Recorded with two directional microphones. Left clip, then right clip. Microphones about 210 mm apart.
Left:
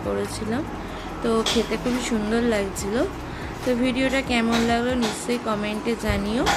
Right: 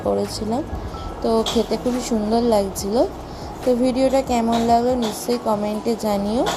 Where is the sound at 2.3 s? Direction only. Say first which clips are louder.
Right 6 dB; 20° right (ahead or behind).